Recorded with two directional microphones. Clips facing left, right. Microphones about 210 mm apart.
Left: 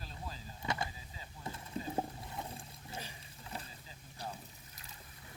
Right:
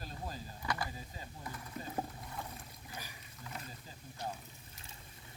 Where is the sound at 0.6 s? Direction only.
25° left (ahead or behind).